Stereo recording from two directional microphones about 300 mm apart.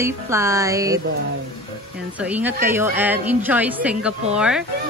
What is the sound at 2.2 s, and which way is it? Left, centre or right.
A woman's voice, centre.